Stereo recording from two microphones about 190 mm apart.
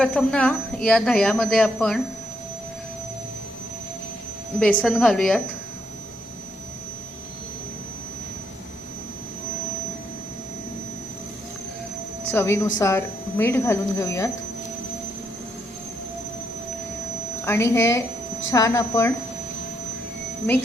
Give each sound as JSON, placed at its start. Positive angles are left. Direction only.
{"t": 0.0, "sound": "speech", "side_deg": 5}
{"t": 4.6, "sound": "speech", "side_deg": 5}
{"t": 12.3, "sound": "speech", "side_deg": 15}
{"t": 17.4, "sound": "speech", "side_deg": 15}